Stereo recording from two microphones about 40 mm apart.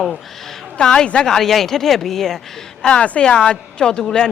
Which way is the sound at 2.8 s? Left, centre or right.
Left.